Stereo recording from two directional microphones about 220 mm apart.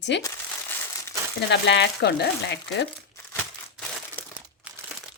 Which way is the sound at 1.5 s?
50° left (ahead or behind).